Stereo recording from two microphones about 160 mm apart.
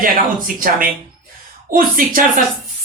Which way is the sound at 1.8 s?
65° right (ahead or behind).